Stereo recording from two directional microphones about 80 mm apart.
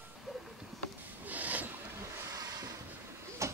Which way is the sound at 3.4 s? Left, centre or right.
Right.